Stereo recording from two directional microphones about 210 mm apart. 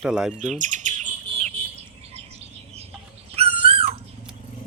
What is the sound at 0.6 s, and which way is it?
Bird, 35° right (ahead or behind).